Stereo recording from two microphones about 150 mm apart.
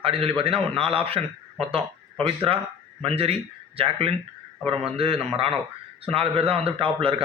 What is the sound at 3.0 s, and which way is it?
A man's voice, 40° right (ahead or behind).